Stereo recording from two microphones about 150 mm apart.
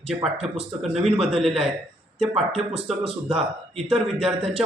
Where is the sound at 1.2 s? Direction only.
40° right (ahead or behind).